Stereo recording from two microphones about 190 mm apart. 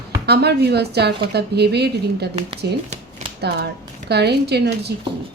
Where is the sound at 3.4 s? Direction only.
60° right (ahead or behind).